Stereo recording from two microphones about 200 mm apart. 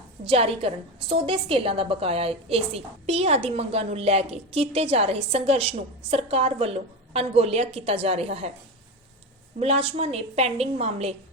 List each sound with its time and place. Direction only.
0.3 s a woman's voice: 30° right (ahead or behind)
9.6 s a woman's voice: 30° right (ahead or behind)